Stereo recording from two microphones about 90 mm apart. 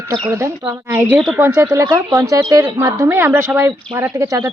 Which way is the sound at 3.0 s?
20° right (ahead or behind).